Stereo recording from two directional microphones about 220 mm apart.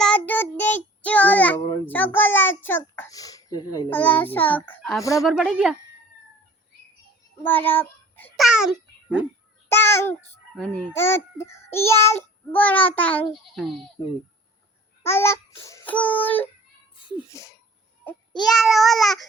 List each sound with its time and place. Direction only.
0.0 s child singing: 5° left (ahead or behind)
1.9 s a child's voice: 10° left (ahead or behind)
7.4 s speech: 10° left (ahead or behind)
8.4 s a child's voice: 5° right (ahead or behind)
9.6 s a child's voice: 10° left (ahead or behind)
15.0 s a child's voice: 10° left (ahead or behind)
17.0 s speech: 20° left (ahead or behind)
18.0 s babbling: 5° left (ahead or behind)